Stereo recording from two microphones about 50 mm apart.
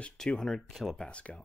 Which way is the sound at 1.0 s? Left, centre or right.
Left.